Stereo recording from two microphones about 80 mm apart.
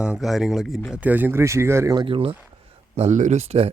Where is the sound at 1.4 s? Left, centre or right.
Right.